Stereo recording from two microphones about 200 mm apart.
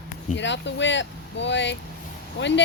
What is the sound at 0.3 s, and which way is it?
Speech, 65° left (ahead or behind).